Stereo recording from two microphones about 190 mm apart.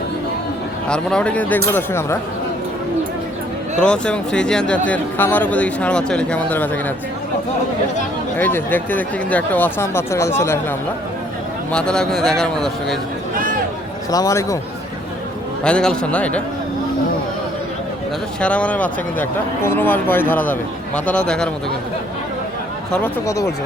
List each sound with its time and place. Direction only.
0.9 s speech: 5° left (ahead or behind)
3.8 s a man's voice: 5° left (ahead or behind)
8.4 s a man's voice: 10° left (ahead or behind)
14.1 s speech: 20° left (ahead or behind)
15.6 s a man's voice: 5° left (ahead or behind)
18.3 s speech: 5° left (ahead or behind)
22.9 s speech: 10° left (ahead or behind)